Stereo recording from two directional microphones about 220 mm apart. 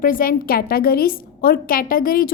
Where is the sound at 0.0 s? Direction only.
40° left (ahead or behind).